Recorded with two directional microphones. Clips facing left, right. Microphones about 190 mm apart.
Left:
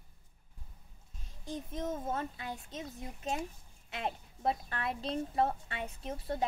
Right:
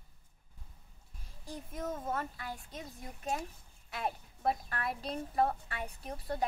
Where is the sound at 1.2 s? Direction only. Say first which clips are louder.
Left 4 dB; 20° left (ahead or behind).